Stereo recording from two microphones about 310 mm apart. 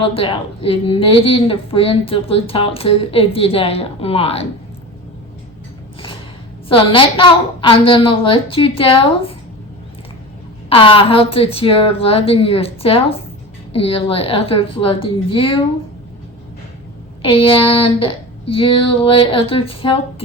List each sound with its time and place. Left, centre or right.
0.0 s a woman's voice: centre
6.7 s a woman's voice: centre
10.7 s a woman's voice: centre
17.2 s a woman's voice: centre